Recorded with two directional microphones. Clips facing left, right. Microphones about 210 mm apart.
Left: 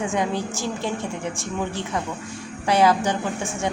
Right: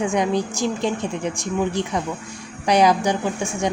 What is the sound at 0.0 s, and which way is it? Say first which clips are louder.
A woman's voice: right 4 dB; 15° right (ahead or behind).